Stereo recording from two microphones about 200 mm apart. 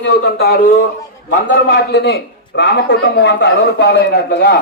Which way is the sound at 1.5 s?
60° left (ahead or behind).